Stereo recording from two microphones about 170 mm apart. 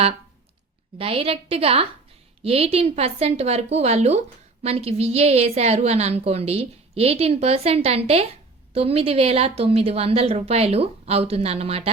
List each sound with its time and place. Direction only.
0.9 s a woman's voice: 35° right (ahead or behind)